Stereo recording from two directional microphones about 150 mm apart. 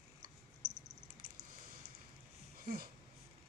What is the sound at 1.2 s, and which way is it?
Squish, 70° right (ahead or behind).